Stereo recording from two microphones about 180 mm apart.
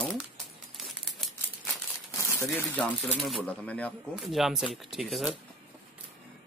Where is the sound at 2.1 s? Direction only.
15° left (ahead or behind).